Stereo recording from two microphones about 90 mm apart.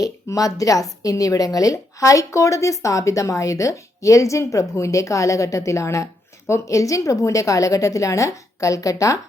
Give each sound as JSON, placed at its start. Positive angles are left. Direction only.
{"t": 0.0, "sound": "speech", "side_deg": 40}